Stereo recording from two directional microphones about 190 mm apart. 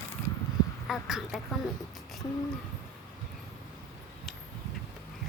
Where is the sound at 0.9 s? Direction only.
Centre (ahead or behind).